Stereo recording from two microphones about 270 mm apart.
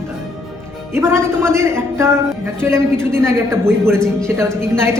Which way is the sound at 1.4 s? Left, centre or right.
Centre.